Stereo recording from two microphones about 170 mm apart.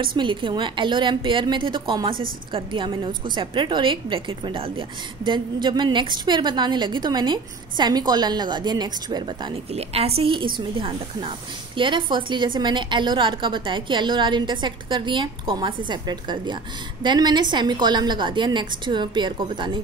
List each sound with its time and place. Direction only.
0.0 s a woman's voice: 30° right (ahead or behind)
9.5 s a woman's voice: 35° right (ahead or behind)